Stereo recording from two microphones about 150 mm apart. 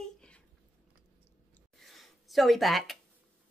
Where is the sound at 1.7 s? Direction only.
Centre (ahead or behind).